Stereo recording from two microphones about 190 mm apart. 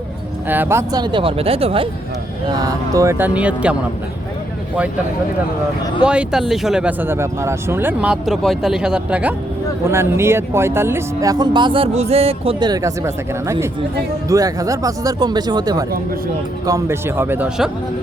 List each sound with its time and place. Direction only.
0.4 s speech: 10° right (ahead or behind); by 1.9 s 30° right (ahead or behind)
2.6 s speech: 20° right (ahead or behind)
6.0 s speech: 5° right (ahead or behind)